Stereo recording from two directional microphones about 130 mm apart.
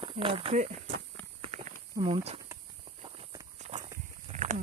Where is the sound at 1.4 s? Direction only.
55° right (ahead or behind).